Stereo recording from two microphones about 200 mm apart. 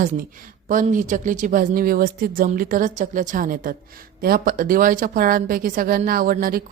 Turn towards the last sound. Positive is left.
turn(degrees=-45)  # may be behind; listen again after turning